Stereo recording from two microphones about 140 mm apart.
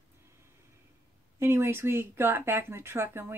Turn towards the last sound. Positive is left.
turn(degrees=-15)  # may be behind; listen again after turning